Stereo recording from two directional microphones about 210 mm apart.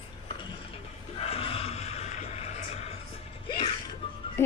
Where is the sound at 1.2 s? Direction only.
25° left (ahead or behind).